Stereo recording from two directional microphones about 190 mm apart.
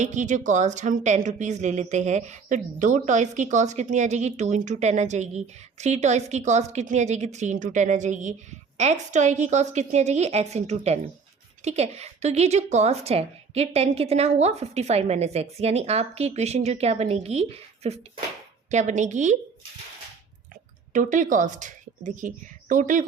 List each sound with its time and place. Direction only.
0.0 s a woman's voice: 40° right (ahead or behind)
20.9 s a woman's voice: 40° right (ahead or behind)